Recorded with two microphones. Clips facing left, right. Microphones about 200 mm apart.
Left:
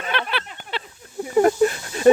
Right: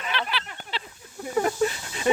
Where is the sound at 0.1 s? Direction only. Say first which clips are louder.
Left 4 dB; 55° left (ahead or behind).